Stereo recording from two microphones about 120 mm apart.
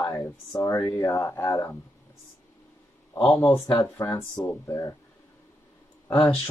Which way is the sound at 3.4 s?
30° left (ahead or behind).